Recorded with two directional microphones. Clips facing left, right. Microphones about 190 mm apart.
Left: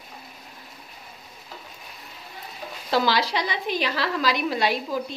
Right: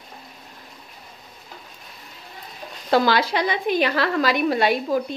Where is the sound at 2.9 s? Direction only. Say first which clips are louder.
Right 4 dB; 55° right (ahead or behind).